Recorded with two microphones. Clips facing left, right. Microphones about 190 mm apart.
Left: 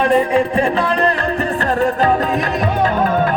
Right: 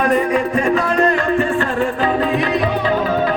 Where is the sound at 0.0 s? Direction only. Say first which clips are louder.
Left 2 dB; 30° left (ahead or behind).